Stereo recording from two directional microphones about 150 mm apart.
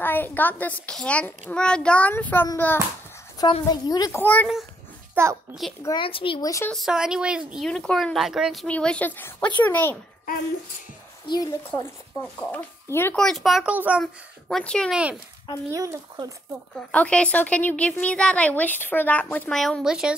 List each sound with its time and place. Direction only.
0.0 s a woman's voice: 15° left (ahead or behind)
3.6 s a woman's voice: 25° left (ahead or behind)
4.2 s a woman's voice: 10° left (ahead or behind)
5.1 s a child's voice: 20° right (ahead or behind)
5.6 s speech: centre (ahead or behind)
5.9 s speech: 35° left (ahead or behind)
6.7 s a woman's voice: centre (ahead or behind)
11.2 s a woman's voice: 25° left (ahead or behind)
11.7 s a woman's voice: 10° left (ahead or behind)
13.1 s a child's voice: 5° left (ahead or behind)
14.5 s speech: 5° left (ahead or behind)
15.7 s speech: 20° right (ahead or behind)
16.7 s a woman's voice: 10° left (ahead or behind)